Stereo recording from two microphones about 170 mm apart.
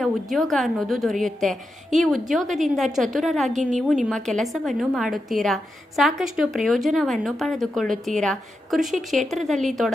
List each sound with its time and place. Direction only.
0.0 s speech: centre (ahead or behind)
3.5 s a woman's voice: 45° right (ahead or behind)
4.1 s speech: centre (ahead or behind)